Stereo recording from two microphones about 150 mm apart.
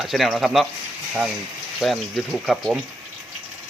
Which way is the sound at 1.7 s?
Centre (ahead or behind).